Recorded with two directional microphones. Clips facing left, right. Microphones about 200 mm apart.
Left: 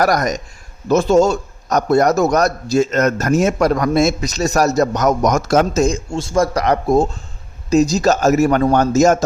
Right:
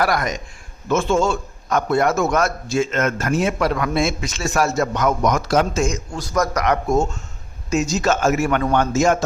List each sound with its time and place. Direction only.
0.0 s a man's voice: 40° left (ahead or behind)